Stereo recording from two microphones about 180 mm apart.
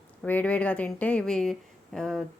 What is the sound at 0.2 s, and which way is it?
A woman's voice, 10° left (ahead or behind).